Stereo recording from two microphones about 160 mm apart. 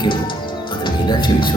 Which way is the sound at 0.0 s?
30° left (ahead or behind).